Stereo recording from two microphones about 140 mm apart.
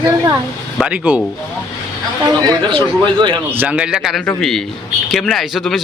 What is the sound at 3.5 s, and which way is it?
Speech, 10° right (ahead or behind).